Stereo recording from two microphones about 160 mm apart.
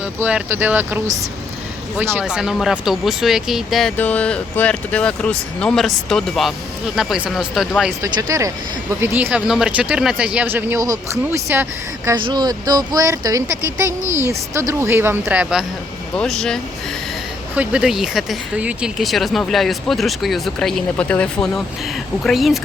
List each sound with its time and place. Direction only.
0.0 s speech: 10° right (ahead or behind)
8.0 s speech: 20° right (ahead or behind)
12.2 s speech: 25° right (ahead or behind); by 16.6 s 5° left (ahead or behind)
17.5 s speech: 10° right (ahead or behind)